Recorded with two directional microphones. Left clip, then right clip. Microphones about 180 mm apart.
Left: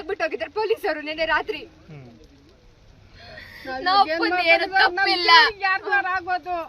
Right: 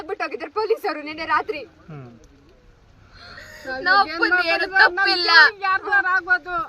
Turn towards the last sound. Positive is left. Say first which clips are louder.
# right 5 dB
turn(degrees=5)  # may be behind; listen again after turning